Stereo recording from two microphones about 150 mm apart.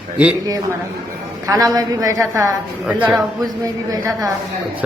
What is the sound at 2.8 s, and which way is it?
Speech, 10° right (ahead or behind).